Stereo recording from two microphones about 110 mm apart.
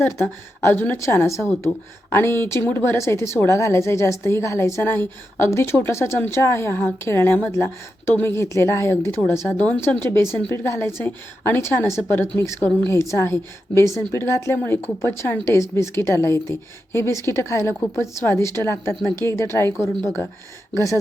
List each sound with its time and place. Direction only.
0.0 s a woman's voice: 20° left (ahead or behind)